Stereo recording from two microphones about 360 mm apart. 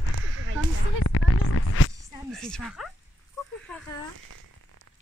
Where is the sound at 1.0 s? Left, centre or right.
Left.